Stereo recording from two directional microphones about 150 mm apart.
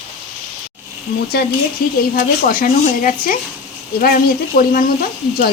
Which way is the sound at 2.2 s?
75° left (ahead or behind).